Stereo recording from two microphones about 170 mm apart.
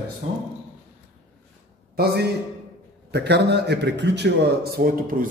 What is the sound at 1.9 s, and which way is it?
A man's voice, 70° right (ahead or behind).